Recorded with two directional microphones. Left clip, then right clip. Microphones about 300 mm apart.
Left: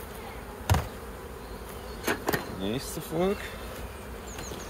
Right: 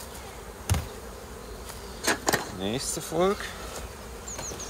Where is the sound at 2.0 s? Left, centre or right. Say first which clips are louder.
Right 3 dB; right.